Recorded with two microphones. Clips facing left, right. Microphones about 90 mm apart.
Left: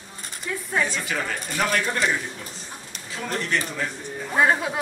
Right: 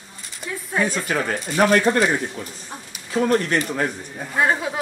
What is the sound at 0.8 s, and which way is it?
Speech, 45° right (ahead or behind).